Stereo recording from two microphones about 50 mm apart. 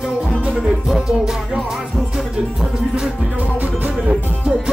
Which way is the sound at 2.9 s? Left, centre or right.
Centre.